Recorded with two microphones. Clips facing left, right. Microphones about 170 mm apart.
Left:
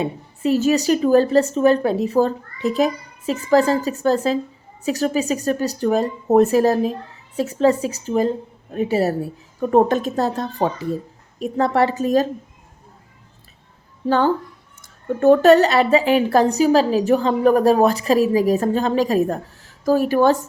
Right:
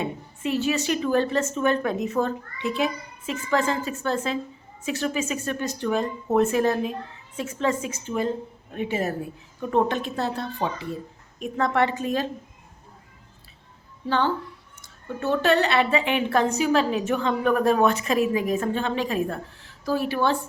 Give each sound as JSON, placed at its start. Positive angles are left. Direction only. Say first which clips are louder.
{"t": 0.0, "sound": "a woman's voice", "louder": "left 6 dB", "side_deg": 40}
{"t": 14.1, "sound": "a woman's voice", "louder": "left 6 dB", "side_deg": 45}